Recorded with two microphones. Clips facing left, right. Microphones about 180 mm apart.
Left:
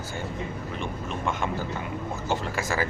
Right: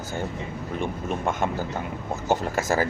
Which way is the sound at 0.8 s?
50° right (ahead or behind).